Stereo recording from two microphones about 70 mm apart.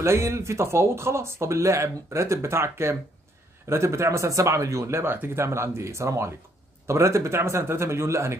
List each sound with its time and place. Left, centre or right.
0.0 s speech: right